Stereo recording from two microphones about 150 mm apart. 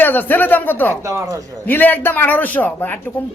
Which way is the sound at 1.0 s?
20° right (ahead or behind).